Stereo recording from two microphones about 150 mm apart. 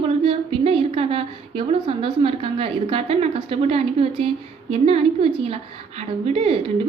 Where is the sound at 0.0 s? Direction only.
40° right (ahead or behind).